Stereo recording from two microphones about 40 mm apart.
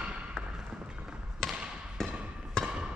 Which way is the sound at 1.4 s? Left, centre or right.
Centre.